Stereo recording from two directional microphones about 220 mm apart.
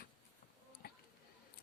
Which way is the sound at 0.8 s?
45° left (ahead or behind).